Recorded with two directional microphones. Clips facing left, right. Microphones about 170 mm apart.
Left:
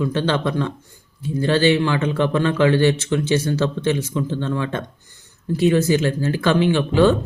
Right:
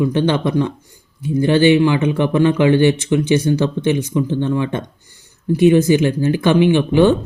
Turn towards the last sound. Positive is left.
turn(degrees=-15)  # may be behind; listen again after turning